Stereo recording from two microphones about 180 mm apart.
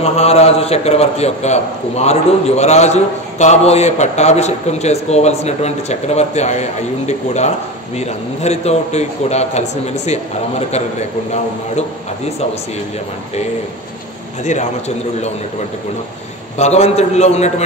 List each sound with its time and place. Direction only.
0.0 s a man's voice: 35° left (ahead or behind)
14.4 s a man's voice: 40° left (ahead or behind)
16.5 s a man's voice: 35° left (ahead or behind)